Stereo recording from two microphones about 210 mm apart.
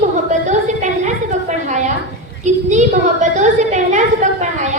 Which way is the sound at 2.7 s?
35° right (ahead or behind).